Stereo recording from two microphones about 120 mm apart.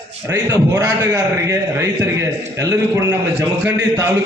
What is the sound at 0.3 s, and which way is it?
A man's voice, 30° right (ahead or behind).